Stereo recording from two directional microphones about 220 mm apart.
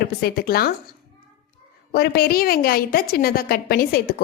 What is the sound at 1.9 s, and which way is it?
A woman's voice, 45° left (ahead or behind).